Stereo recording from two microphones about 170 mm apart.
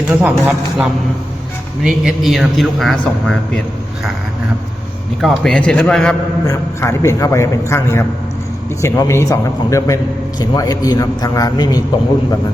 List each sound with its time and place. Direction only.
0.1 s a man's voice: 10° right (ahead or behind)
5.2 s a man's voice: 5° left (ahead or behind)
6.5 s a man's voice: 15° left (ahead or behind)